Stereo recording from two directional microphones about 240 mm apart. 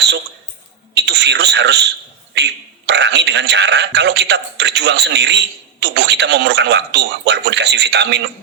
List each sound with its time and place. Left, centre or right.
1.0 s radio: right
2.3 s a man's voice: right